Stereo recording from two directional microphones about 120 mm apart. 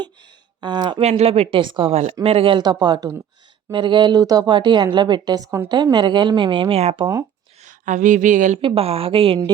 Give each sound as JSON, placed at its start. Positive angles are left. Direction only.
{"t": 0.0, "sound": "music", "side_deg": -40}
{"t": 1.0, "sound": "a woman's voice", "side_deg": -60}
{"t": 7.6, "sound": "speech", "side_deg": -90}
{"t": 8.6, "sound": "a woman's voice", "side_deg": -55}